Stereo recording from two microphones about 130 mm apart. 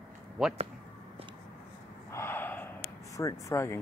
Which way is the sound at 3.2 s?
25° left (ahead or behind).